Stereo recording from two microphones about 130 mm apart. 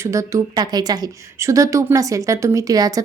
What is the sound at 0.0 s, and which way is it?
Speech, 25° right (ahead or behind).